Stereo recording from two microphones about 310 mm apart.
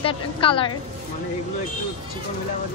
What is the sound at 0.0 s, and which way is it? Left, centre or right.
Speech, centre.